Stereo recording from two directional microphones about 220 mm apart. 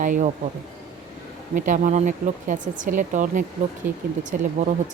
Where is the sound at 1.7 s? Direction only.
35° right (ahead or behind).